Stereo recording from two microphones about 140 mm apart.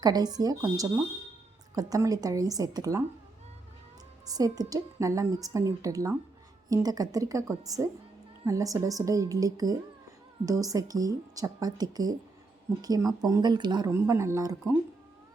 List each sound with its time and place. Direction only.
0.0 s a woman's voice: 30° right (ahead or behind)
4.3 s a woman's voice: 25° right (ahead or behind)
13.9 s a woman's voice: 20° right (ahead or behind)